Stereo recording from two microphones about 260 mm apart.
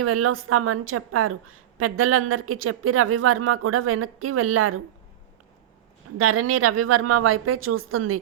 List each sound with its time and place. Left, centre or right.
0.0 s a woman's voice: right
6.1 s a woman's voice: right